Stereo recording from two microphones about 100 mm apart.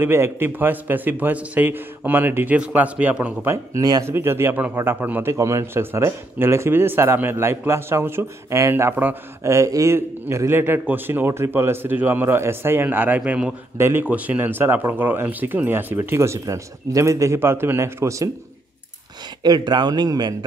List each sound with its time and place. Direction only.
0.0 s a man's voice: 25° right (ahead or behind)
3.7 s speech: 40° right (ahead or behind)
4.0 s a man's voice: 25° right (ahead or behind)
13.7 s a man's voice: 25° right (ahead or behind)
14.0 s a man's voice: 15° right (ahead or behind); by 18.3 s 30° right (ahead or behind)
19.4 s a man's voice: 40° right (ahead or behind)